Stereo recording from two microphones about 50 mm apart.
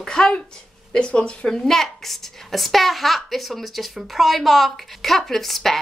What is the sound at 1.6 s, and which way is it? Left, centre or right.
A woman's voice, centre.